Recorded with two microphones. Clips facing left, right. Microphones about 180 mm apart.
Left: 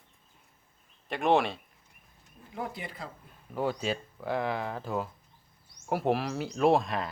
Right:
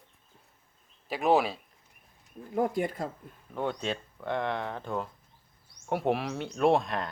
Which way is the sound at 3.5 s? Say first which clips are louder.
Left 1 dB; 5° left (ahead or behind).